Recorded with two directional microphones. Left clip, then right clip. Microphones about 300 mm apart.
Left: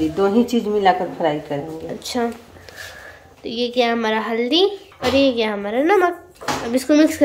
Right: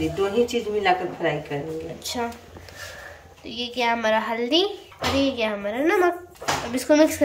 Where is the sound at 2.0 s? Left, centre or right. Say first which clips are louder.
Left 7 dB; centre.